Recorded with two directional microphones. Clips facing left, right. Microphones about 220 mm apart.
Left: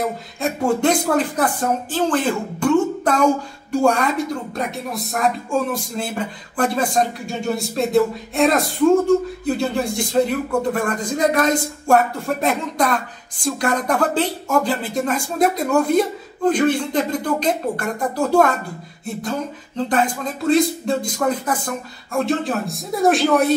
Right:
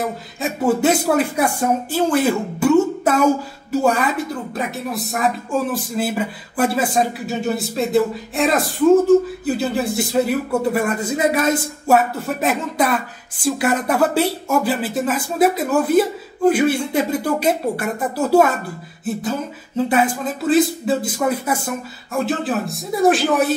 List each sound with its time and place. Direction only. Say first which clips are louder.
0.0 s speech: left 1 dB; 5° right (ahead or behind)
19.9 s speech: even; 5° right (ahead or behind)